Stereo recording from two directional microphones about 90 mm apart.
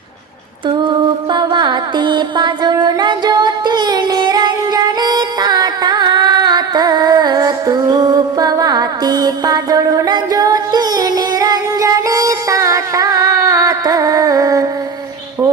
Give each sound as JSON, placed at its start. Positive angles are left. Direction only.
{"t": 0.9, "sound": "music", "side_deg": -60}